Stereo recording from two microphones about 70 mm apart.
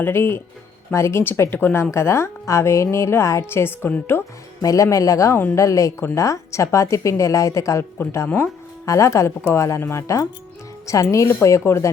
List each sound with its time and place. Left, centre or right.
0.0 s a woman's voice: left
4.6 s speech: left